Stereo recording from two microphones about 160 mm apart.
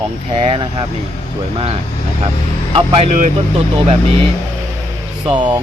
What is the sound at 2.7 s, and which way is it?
Speech, 40° right (ahead or behind).